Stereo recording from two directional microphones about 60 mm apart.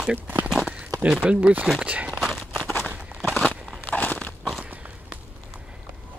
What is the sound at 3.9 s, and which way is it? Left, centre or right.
Biting, left.